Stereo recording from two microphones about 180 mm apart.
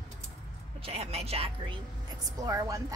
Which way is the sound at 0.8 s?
35° right (ahead or behind).